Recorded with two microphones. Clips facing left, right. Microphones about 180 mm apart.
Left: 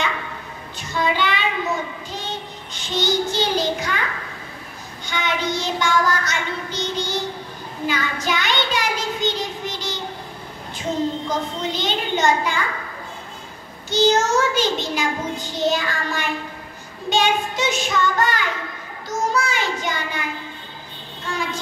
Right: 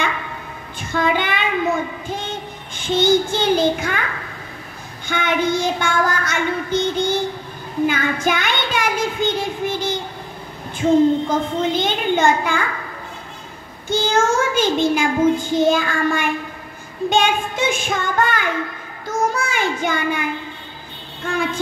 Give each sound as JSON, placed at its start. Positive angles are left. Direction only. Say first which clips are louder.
{"t": 0.9, "sound": "a woman's voice", "louder": "right 2 dB", "side_deg": -50}
{"t": 2.0, "sound": "child singing", "louder": "right 4 dB", "side_deg": -50}
{"t": 5.0, "sound": "child singing", "louder": "right 5 dB", "side_deg": -50}
{"t": 11.2, "sound": "child singing", "louder": "right 5 dB", "side_deg": -50}
{"t": 13.8, "sound": "child singing", "louder": "even", "side_deg": -50}